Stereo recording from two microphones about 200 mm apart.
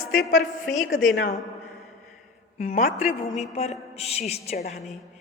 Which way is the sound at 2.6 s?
35° left (ahead or behind).